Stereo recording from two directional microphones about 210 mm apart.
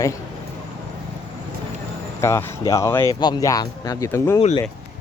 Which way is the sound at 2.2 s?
15° left (ahead or behind).